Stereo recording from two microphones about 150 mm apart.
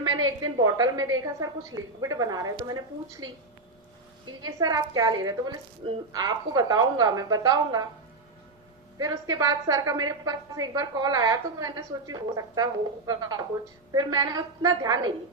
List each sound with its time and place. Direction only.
0.0 s a woman's voice: 30° right (ahead or behind)
4.3 s a woman's voice: 25° right (ahead or behind)
9.0 s a woman's voice: 25° right (ahead or behind)